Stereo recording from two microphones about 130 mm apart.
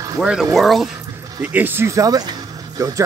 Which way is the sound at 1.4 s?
15° right (ahead or behind).